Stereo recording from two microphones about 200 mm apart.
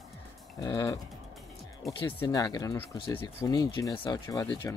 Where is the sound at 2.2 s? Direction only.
20° left (ahead or behind).